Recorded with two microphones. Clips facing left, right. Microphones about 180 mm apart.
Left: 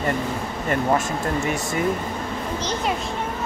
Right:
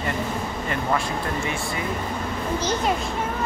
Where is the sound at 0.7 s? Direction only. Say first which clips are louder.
Left 5 dB; 45° left (ahead or behind).